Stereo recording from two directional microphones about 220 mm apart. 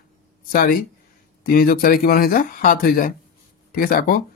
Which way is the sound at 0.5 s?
40° left (ahead or behind).